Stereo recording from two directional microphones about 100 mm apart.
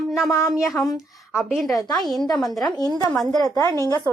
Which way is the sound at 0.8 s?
30° left (ahead or behind).